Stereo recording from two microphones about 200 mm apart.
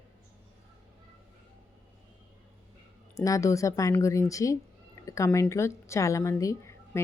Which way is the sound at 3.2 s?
15° left (ahead or behind).